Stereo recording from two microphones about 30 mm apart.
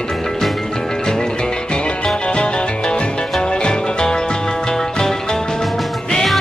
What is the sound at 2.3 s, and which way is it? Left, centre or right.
Music, left.